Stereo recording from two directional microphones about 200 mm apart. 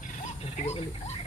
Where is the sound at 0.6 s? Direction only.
30° left (ahead or behind).